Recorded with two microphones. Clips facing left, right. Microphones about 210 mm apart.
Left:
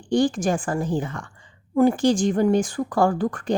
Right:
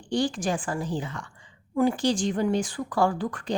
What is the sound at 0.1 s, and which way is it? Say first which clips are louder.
A woman's voice: left 6 dB; 50° left (ahead or behind).